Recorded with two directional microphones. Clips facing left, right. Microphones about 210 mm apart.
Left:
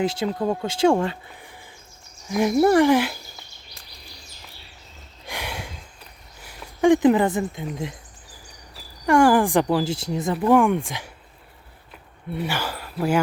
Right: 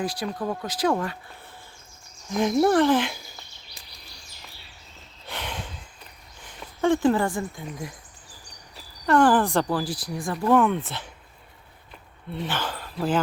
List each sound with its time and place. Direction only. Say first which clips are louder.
0.0 s speech: left 5 dB; 25° left (ahead or behind)
2.3 s speech: left 3 dB; 5° left (ahead or behind)
5.2 s a sound: left 2 dB; 10° left (ahead or behind)
6.4 s speech: left 5 dB; 10° left (ahead or behind)
9.0 s speech: left 2 dB; 10° left (ahead or behind)
10.4 s speech: left 2 dB; 10° left (ahead or behind)
12.3 s speech: left 2 dB; 10° left (ahead or behind)